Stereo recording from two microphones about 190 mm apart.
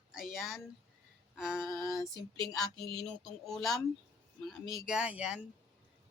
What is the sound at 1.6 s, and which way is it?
Female singing, 15° left (ahead or behind).